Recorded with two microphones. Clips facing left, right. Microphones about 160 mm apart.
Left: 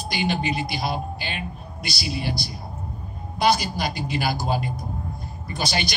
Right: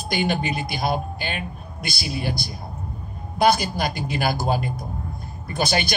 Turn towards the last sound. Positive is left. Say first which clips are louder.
# right 3 dB
turn(degrees=-50)  # may be behind; listen again after turning